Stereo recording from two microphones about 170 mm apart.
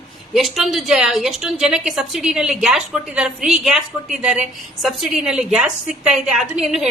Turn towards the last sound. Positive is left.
turn(degrees=0)  # may be behind; listen again after turning